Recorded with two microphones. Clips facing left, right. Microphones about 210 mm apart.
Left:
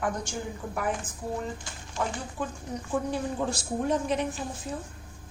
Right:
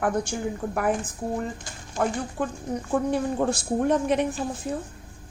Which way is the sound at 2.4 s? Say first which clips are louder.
Right 4 dB; 50° right (ahead or behind).